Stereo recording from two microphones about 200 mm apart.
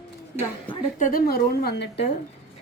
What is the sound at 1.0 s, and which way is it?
A woman's voice, 45° left (ahead or behind).